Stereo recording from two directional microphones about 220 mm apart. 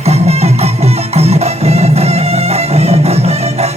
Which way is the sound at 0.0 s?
30° right (ahead or behind).